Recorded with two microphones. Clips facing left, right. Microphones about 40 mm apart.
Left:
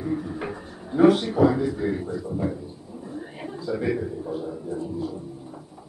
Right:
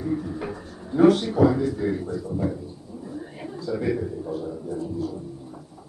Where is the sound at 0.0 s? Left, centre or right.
Centre.